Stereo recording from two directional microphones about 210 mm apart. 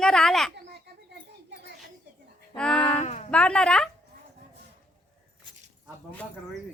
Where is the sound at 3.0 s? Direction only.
30° left (ahead or behind).